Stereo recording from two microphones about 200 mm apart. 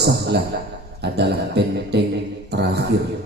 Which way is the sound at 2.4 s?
55° right (ahead or behind).